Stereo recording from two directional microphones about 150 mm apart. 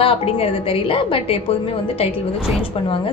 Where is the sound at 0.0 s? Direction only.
35° left (ahead or behind).